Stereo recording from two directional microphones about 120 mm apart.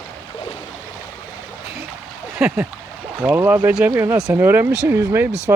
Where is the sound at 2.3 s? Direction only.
10° right (ahead or behind).